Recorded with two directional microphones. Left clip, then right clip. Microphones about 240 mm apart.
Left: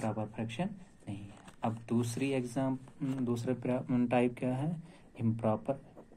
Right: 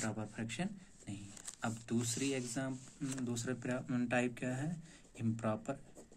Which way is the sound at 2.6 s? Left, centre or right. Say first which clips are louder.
Left 7 dB; right.